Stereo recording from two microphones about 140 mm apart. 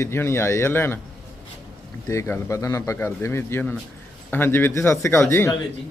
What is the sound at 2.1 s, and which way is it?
A man's voice, 20° left (ahead or behind).